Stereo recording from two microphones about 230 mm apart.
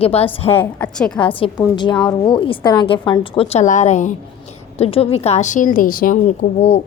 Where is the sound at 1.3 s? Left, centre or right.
Left.